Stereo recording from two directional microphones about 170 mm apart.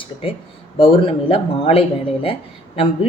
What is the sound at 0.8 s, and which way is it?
Speech, 30° left (ahead or behind).